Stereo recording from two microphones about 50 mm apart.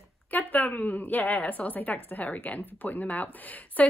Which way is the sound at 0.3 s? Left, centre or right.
Left.